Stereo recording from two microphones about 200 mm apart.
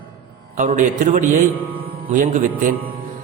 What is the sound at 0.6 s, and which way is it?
A man's voice, 40° right (ahead or behind).